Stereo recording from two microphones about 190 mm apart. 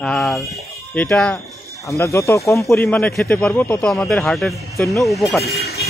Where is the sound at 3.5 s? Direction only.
15° left (ahead or behind).